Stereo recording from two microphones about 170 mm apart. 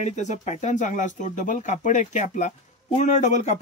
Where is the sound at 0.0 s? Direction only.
45° left (ahead or behind).